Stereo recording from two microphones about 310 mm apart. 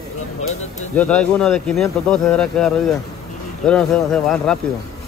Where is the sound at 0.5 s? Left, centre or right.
Left.